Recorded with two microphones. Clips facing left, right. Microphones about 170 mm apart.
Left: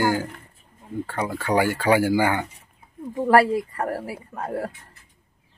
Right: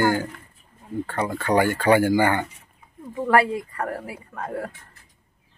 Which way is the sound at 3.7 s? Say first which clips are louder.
Left 2 dB; 35° left (ahead or behind).